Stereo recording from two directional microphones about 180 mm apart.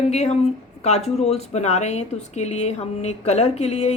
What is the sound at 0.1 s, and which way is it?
Speech, 35° left (ahead or behind).